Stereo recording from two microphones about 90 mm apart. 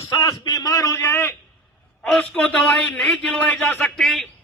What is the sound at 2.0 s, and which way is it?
A man's voice, 10° left (ahead or behind).